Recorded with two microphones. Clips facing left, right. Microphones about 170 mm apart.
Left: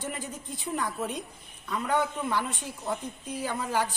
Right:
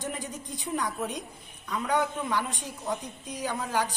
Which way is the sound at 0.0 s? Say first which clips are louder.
Right 1 dB; 5° left (ahead or behind).